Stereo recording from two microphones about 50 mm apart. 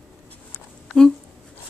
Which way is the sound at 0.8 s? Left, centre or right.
Centre.